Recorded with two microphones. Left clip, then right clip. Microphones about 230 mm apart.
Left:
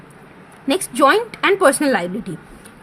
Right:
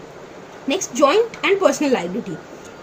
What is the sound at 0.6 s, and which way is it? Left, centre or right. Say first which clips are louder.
A woman's voice: left 2 dB; left.